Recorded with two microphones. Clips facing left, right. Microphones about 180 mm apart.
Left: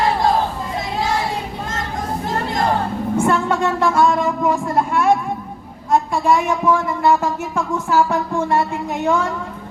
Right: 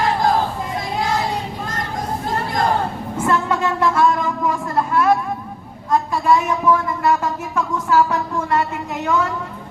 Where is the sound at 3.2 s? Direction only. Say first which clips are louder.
Left 1 dB; 25° left (ahead or behind).